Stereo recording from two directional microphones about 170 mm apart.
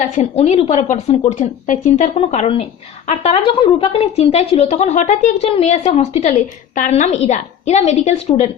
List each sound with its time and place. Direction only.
0.2 s a woman's voice: 35° left (ahead or behind)